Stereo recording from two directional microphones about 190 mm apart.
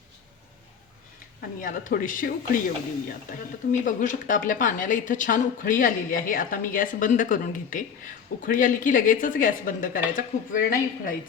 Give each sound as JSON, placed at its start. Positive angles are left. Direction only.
{"t": 1.6, "sound": "a woman's voice", "side_deg": 45}
{"t": 3.7, "sound": "a woman's voice", "side_deg": 45}